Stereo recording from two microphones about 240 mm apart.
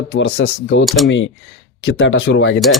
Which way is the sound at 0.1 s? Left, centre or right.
Left.